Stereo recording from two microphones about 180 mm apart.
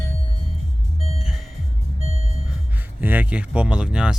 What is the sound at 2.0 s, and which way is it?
Vehicle, 35° right (ahead or behind).